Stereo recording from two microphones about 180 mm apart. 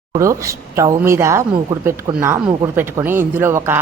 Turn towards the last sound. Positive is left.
turn(degrees=-15)  # may be behind; listen again after turning